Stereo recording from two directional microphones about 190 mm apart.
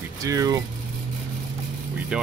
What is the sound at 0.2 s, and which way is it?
Speech, 20° right (ahead or behind).